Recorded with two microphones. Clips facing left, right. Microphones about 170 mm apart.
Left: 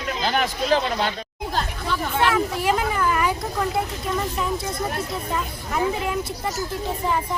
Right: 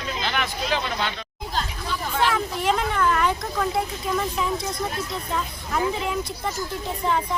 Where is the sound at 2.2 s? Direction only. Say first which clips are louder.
Left 2 dB; 5° left (ahead or behind).